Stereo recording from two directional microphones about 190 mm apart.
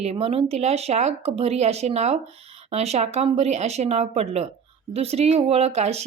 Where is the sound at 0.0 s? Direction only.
35° right (ahead or behind).